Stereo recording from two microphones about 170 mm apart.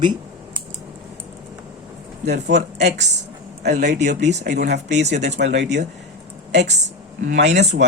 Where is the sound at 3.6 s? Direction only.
75° right (ahead or behind).